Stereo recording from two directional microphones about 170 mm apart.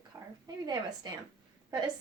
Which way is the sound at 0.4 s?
25° right (ahead or behind).